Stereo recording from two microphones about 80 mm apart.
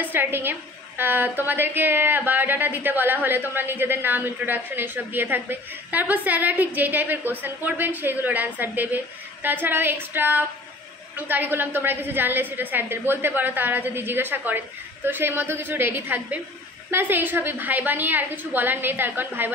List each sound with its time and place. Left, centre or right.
0.0 s a woman's voice: right